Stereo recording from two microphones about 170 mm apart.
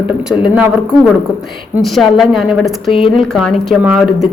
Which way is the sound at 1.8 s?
Centre (ahead or behind).